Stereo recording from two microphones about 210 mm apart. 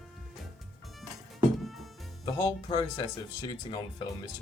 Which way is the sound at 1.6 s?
Centre (ahead or behind).